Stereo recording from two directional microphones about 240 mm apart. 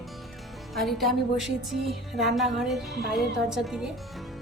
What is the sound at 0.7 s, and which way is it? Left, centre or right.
A woman's voice, centre.